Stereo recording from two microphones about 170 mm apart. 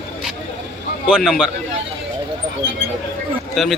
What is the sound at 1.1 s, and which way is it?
Speech, centre (ahead or behind).